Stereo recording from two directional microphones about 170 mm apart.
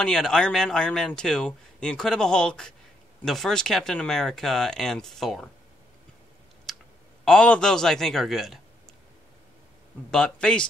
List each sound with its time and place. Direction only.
0.0 s speech: 5° left (ahead or behind)
6.7 s clicking: centre (ahead or behind)
7.2 s speech: 5° left (ahead or behind)
10.1 s speech: 5° left (ahead or behind)